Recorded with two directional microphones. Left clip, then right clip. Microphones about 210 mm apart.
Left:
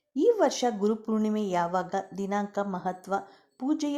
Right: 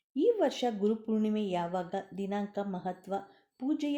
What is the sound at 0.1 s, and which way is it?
A woman's voice, centre (ahead or behind).